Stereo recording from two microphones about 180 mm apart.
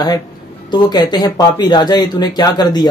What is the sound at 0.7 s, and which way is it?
Speech, 25° left (ahead or behind).